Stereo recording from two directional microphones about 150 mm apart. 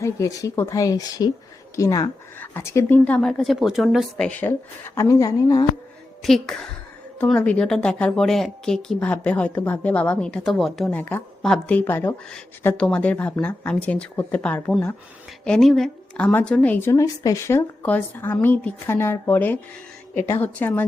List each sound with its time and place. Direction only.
0.0 s speech: 20° left (ahead or behind)
4.9 s speech: 20° left (ahead or behind)
6.2 s a woman's voice: centre (ahead or behind)